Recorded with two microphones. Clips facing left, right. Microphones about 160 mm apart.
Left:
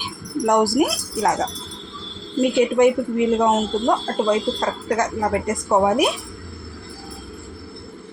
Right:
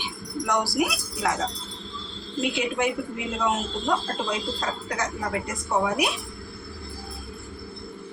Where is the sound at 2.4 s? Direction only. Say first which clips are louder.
Left 10 dB; 45° left (ahead or behind).